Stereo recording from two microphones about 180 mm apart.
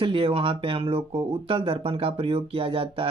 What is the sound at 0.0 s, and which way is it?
Speech, 30° right (ahead or behind).